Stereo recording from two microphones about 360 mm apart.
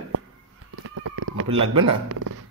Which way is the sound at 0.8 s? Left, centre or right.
Right.